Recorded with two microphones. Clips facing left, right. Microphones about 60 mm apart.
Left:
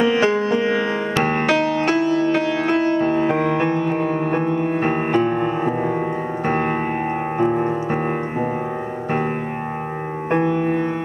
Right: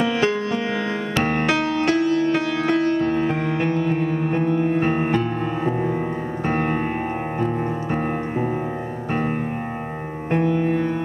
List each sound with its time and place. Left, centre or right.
0.0 s music: left
1.6 s music: left
2.3 s music: centre
2.8 s music: left
5.1 s music: left
6.4 s music: left
7.5 s music: left
10.3 s music: left